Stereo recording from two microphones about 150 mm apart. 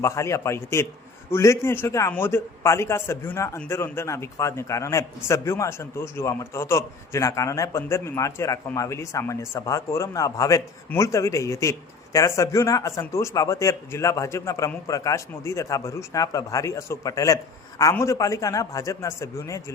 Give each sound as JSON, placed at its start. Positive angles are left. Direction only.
{"t": 0.0, "sound": "a man's voice", "side_deg": 20}